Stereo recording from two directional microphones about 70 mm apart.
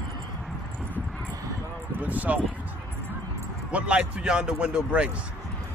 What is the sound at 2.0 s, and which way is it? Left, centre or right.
Speech, right.